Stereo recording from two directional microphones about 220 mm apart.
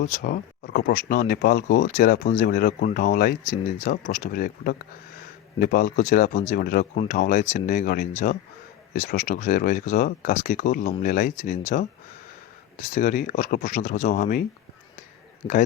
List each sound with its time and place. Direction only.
0.0 s speech: 40° left (ahead or behind)
12.9 s speech: 40° left (ahead or behind)